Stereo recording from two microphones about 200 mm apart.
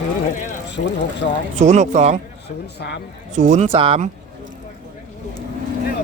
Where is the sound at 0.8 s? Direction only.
60° left (ahead or behind).